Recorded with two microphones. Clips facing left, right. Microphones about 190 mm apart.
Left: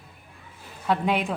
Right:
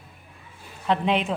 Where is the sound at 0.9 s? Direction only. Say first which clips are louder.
Right 1 dB; 5° left (ahead or behind).